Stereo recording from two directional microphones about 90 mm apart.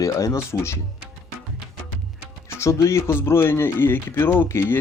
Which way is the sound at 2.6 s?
35° left (ahead or behind).